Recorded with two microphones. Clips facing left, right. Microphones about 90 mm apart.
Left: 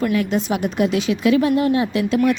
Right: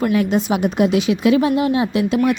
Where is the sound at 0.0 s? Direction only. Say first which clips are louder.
Right 2 dB; 25° right (ahead or behind).